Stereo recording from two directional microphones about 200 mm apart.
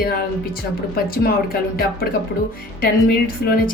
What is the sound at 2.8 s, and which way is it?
Speech, 45° left (ahead or behind).